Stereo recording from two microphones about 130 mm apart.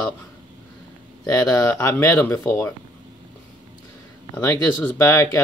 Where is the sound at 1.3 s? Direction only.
25° left (ahead or behind).